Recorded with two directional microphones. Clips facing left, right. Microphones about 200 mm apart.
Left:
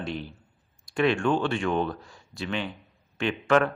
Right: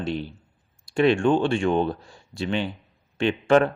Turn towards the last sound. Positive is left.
turn(degrees=-30)  # may be behind; listen again after turning